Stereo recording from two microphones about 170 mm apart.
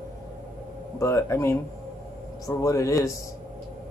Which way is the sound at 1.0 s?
15° left (ahead or behind).